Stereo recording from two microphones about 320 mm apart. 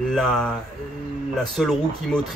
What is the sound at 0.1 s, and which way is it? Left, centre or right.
Speech, centre.